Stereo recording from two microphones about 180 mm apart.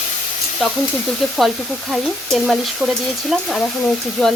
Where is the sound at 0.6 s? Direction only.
Centre (ahead or behind).